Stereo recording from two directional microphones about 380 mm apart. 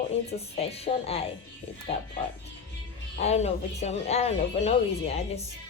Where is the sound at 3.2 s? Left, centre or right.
Centre.